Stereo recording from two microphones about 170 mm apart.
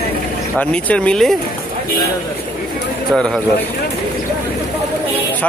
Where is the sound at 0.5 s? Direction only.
10° left (ahead or behind).